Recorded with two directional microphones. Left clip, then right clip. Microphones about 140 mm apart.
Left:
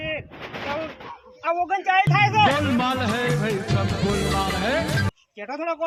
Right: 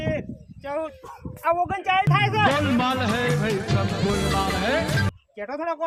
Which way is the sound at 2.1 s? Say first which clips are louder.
Left 2 dB; 15° right (ahead or behind).